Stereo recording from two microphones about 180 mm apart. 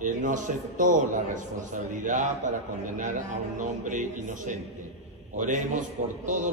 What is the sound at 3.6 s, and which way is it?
A man's voice, 45° right (ahead or behind).